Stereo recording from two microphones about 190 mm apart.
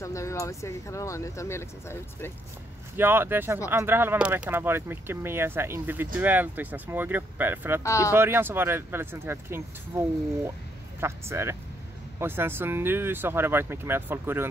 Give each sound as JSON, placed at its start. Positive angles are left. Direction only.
{"t": 0.0, "sound": "speech", "side_deg": 15}
{"t": 3.0, "sound": "speech", "side_deg": -10}
{"t": 7.8, "sound": "speech", "side_deg": 15}
{"t": 8.1, "sound": "speech", "side_deg": -10}